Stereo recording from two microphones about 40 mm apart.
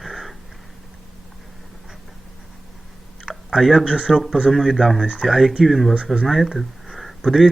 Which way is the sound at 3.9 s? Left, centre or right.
Right.